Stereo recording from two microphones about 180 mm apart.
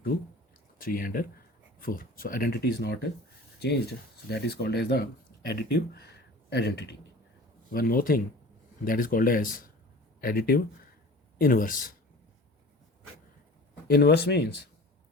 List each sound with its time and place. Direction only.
0.8 s speech: 50° left (ahead or behind); by 6.9 s 70° left (ahead or behind)
7.7 s speech: 55° left (ahead or behind)
13.8 s speech: 60° left (ahead or behind)